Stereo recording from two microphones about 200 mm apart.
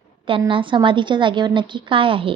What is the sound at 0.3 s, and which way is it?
A woman's voice, 25° right (ahead or behind).